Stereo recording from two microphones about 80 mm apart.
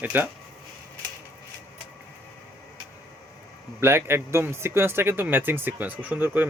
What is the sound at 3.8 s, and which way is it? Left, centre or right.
Speech, right.